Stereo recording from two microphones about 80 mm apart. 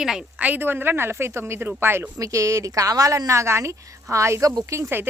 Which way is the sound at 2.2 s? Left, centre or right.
Right.